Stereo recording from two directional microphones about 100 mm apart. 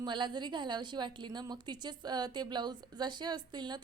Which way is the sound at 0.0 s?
50° right (ahead or behind).